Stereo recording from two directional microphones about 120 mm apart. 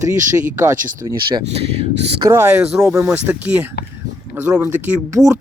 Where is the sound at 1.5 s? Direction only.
60° right (ahead or behind).